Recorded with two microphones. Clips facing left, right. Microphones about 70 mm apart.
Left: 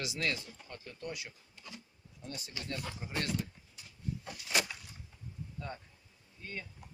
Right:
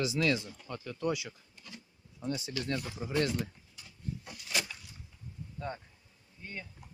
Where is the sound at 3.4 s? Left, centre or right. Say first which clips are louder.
Right 3 dB; right.